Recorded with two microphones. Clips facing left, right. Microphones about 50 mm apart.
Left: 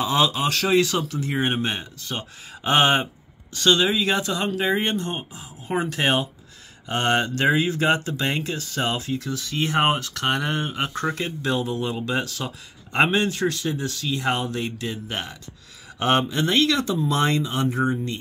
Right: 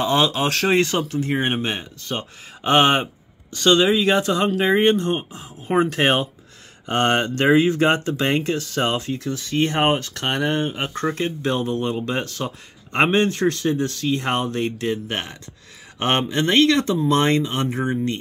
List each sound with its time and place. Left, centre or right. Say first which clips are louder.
0.0 s speech: right 2 dB; right
4.1 s speech: right 5 dB; centre
4.7 s speech: right 7 dB; right
10.1 s speech: right 2 dB; right
13.2 s speech: right 4 dB; right